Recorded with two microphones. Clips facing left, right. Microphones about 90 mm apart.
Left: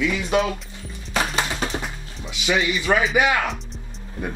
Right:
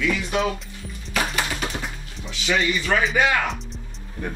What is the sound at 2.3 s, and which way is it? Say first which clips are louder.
Speech: left 1 dB; 15° left (ahead or behind).